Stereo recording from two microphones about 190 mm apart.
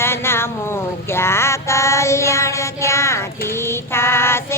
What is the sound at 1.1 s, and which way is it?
Child singing, 15° left (ahead or behind).